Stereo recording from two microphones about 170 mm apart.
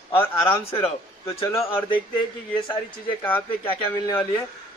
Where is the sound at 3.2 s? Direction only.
10° left (ahead or behind).